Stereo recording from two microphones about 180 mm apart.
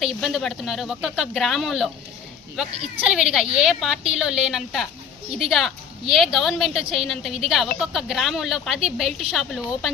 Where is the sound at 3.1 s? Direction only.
5° right (ahead or behind).